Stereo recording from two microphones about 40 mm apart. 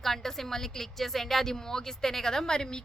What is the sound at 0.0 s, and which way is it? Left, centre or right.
A woman's voice, centre.